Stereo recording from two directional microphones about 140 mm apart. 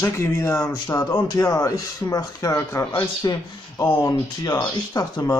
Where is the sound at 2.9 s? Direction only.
30° left (ahead or behind).